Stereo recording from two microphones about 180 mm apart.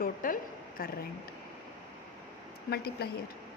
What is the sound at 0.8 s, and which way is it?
Speech, 55° left (ahead or behind).